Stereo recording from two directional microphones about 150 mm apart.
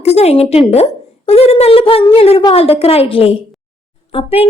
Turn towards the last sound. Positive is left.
turn(degrees=40)  # may be behind; listen again after turning